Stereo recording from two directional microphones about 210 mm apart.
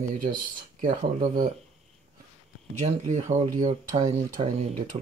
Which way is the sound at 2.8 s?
35° right (ahead or behind).